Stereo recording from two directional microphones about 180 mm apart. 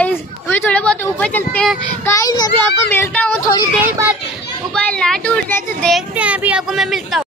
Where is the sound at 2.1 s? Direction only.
20° left (ahead or behind).